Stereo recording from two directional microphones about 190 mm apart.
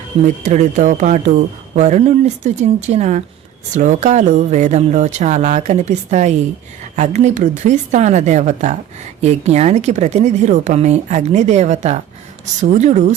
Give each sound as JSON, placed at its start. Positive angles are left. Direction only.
{"t": 0.4, "sound": "speech", "side_deg": -40}